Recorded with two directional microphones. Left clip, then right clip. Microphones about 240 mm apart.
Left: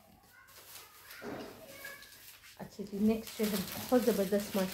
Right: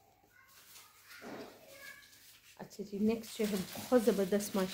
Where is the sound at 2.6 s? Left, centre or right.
Right.